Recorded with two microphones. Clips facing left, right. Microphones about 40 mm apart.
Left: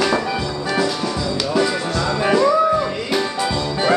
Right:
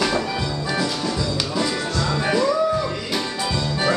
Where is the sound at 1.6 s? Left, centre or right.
Left.